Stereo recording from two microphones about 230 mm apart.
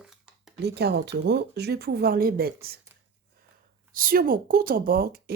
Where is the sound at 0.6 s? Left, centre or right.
Right.